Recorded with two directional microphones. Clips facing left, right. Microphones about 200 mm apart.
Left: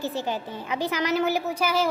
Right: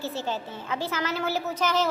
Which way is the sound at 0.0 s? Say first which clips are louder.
Left 2 dB; 15° left (ahead or behind).